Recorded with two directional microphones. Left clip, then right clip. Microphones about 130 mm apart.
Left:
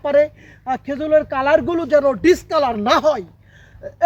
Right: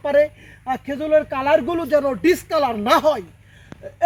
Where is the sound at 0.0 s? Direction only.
10° left (ahead or behind).